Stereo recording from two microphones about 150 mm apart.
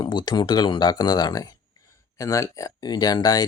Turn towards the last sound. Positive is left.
turn(degrees=25)  # may be behind; listen again after turning